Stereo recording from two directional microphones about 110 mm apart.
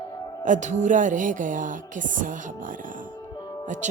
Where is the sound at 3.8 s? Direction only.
90° right.